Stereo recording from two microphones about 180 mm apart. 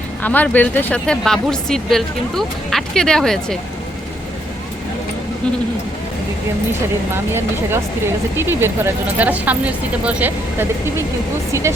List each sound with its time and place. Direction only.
0.2 s speech: 10° left (ahead or behind)
7.3 s speech: 15° right (ahead or behind)